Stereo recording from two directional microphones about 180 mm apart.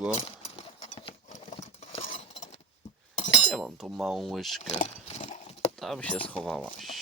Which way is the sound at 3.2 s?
35° left (ahead or behind).